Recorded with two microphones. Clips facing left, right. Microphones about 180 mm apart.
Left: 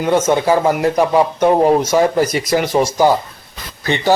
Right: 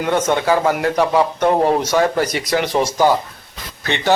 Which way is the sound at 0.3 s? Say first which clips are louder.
Left 2 dB; 15° left (ahead or behind).